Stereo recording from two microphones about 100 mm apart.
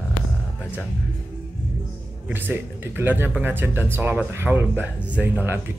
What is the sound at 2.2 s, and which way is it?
Speech, 20° right (ahead or behind).